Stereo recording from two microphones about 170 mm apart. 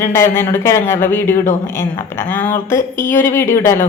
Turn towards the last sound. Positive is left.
turn(degrees=15)  # may be behind; listen again after turning